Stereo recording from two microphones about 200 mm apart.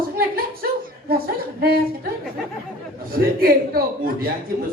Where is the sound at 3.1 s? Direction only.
45° right (ahead or behind).